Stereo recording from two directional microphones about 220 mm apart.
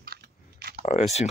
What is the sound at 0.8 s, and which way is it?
Speech, 30° left (ahead or behind).